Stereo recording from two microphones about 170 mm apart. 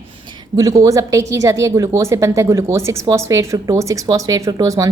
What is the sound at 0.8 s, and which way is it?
A woman's voice, 20° right (ahead or behind).